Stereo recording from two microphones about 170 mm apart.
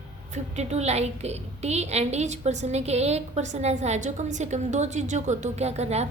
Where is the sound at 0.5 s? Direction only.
40° right (ahead or behind).